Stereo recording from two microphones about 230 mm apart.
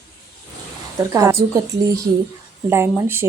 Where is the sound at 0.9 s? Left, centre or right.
Centre.